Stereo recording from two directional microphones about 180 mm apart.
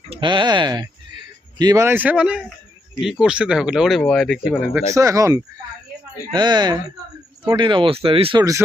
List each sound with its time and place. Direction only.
0.1 s speech: 25° right (ahead or behind); by 4.8 s 5° right (ahead or behind)
4.9 s speech: 15° right (ahead or behind)